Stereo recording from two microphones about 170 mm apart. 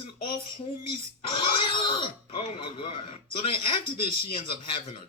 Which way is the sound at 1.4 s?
30° left (ahead or behind).